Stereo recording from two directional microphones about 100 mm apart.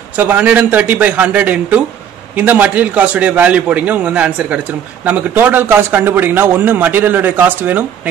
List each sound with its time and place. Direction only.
0.2 s a man's voice: 15° right (ahead or behind)